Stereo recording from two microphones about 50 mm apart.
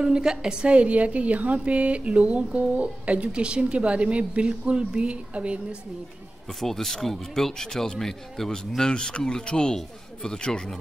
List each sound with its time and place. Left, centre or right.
0.0 s a woman's voice: centre
6.6 s speech: centre